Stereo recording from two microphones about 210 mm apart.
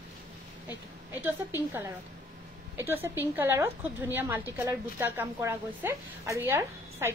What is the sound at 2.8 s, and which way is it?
A woman's voice, 10° right (ahead or behind).